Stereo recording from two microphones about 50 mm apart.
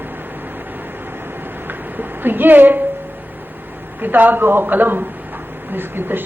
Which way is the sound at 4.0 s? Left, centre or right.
Right.